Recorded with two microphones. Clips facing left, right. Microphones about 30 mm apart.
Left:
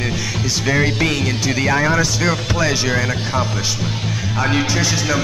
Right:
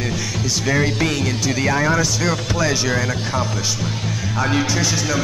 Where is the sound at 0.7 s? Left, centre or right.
Centre.